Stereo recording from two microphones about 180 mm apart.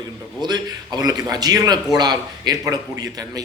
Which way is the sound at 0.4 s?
20° right (ahead or behind).